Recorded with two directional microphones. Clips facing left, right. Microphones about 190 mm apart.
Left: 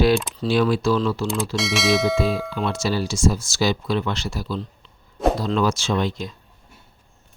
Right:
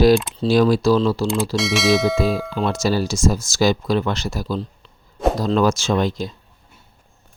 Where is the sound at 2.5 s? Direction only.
40° right (ahead or behind).